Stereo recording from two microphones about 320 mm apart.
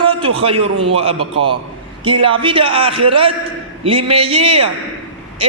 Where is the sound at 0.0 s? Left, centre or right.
Centre.